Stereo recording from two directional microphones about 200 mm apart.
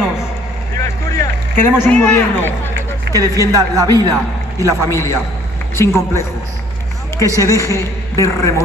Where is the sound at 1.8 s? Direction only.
10° left (ahead or behind).